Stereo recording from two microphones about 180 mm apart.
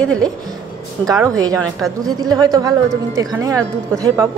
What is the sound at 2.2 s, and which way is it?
A woman's voice, 20° right (ahead or behind).